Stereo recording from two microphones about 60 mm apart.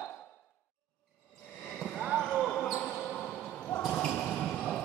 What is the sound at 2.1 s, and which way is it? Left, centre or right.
Basketball bounce, centre.